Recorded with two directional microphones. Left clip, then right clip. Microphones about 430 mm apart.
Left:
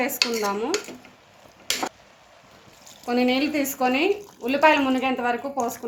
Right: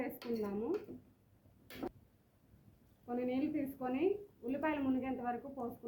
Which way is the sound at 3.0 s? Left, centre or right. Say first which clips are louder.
Left 16 dB; left.